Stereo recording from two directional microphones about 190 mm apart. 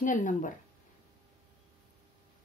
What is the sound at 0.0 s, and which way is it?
Speech, 40° left (ahead or behind).